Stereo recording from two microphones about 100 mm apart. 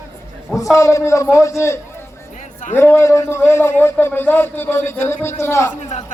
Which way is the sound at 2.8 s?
25° left (ahead or behind).